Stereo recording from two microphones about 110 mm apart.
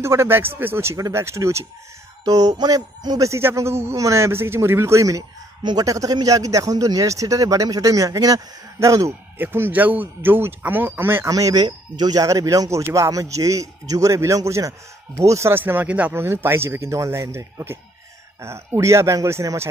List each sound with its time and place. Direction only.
0.0 s a man's voice: 25° right (ahead or behind)
5.6 s speech: 45° right (ahead or behind)
5.9 s speech: 30° right (ahead or behind)
9.4 s a man's voice: 20° right (ahead or behind)
11.2 s a man's voice: 30° right (ahead or behind)